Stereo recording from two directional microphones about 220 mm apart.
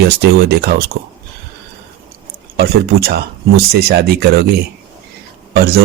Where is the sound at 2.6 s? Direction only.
45° right (ahead or behind).